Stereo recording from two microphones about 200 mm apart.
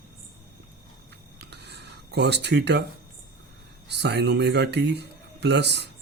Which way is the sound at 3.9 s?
60° right (ahead or behind).